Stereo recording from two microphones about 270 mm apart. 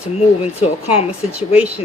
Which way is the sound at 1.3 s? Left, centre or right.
Centre.